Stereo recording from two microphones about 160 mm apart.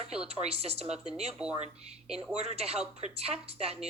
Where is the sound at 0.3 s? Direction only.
40° right (ahead or behind).